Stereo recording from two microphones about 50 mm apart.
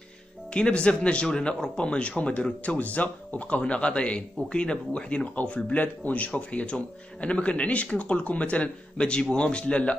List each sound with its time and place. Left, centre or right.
0.5 s speech: centre